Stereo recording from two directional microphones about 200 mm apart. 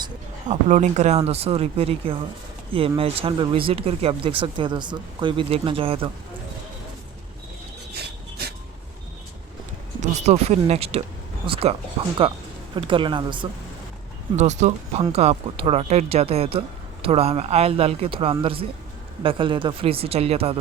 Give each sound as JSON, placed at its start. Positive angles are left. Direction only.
{"t": 0.4, "sound": "speech", "side_deg": -35}
{"t": 10.0, "sound": "speech", "side_deg": -35}
{"t": 14.3, "sound": "speech", "side_deg": -35}